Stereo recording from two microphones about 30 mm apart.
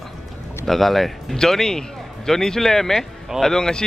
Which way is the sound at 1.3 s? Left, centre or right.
Centre.